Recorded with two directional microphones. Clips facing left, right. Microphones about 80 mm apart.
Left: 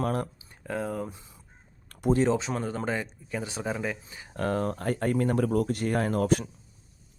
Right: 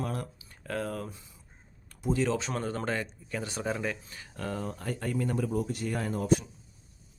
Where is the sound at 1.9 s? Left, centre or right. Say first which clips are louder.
Left 6 dB; left.